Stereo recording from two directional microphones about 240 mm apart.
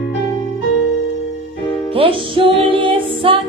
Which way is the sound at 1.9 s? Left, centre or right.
Right.